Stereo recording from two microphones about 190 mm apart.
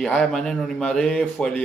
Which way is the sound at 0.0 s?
5° left (ahead or behind).